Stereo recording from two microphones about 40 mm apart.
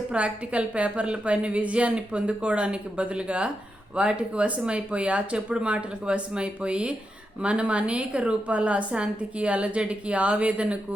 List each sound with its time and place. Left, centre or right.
0.1 s a woman's voice: right